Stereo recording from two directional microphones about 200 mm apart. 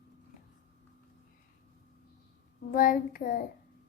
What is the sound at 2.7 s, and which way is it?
Child singing, 40° left (ahead or behind).